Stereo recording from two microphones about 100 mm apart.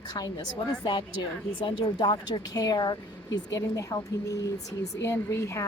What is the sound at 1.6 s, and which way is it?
Speech, 55° left (ahead or behind).